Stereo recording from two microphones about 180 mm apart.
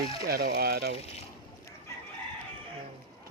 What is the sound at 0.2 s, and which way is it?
Speech, 60° right (ahead or behind).